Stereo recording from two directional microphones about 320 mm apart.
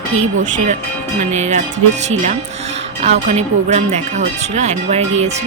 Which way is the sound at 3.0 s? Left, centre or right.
Centre.